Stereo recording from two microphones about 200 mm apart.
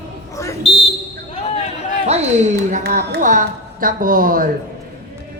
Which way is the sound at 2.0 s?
35° right (ahead or behind).